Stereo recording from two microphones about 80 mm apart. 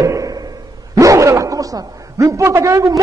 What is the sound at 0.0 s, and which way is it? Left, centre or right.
A man's voice, right.